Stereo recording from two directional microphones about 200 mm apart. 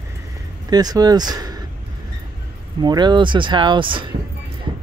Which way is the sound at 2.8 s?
20° right (ahead or behind).